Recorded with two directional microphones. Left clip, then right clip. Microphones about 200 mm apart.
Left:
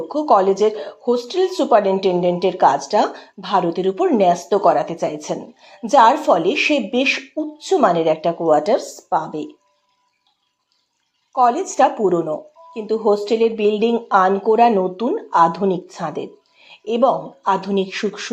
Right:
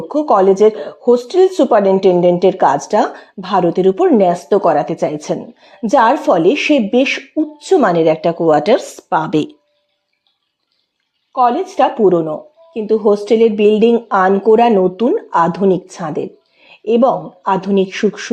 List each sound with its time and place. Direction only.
0.1 s speech: 40° right (ahead or behind)
11.3 s speech: 30° right (ahead or behind)